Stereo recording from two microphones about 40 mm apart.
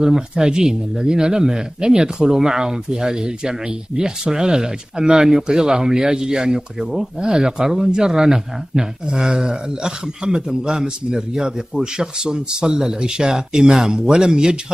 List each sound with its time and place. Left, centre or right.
0.0 s a man's voice: centre